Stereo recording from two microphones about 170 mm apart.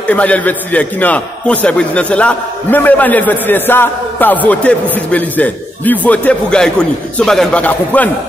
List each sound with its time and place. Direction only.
0.1 s a man's voice: 10° left (ahead or behind)